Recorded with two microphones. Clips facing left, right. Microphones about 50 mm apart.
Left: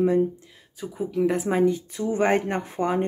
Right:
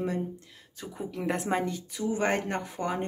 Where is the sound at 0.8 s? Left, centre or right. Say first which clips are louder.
Left 10 dB; centre.